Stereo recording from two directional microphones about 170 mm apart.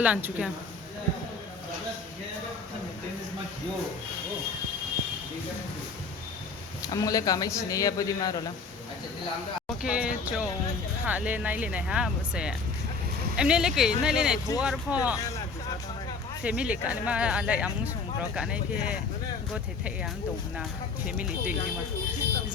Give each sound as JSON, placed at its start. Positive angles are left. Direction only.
{"t": 0.0, "sound": "speech", "side_deg": -10}
{"t": 6.9, "sound": "speech", "side_deg": 20}
{"t": 9.8, "sound": "speech", "side_deg": -5}
{"t": 16.4, "sound": "speech", "side_deg": -5}
{"t": 21.2, "sound": "speech", "side_deg": -10}